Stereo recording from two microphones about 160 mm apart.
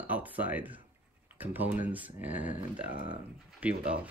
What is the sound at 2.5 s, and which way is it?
Speech, 65° left (ahead or behind).